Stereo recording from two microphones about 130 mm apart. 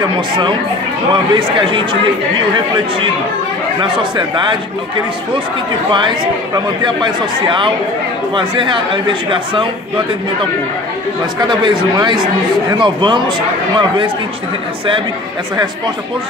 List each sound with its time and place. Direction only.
1.3 s speech: 40° right (ahead or behind)
3.8 s speech: 40° right (ahead or behind)
5.9 s speech: 40° right (ahead or behind)
11.3 s speech: 35° right (ahead or behind)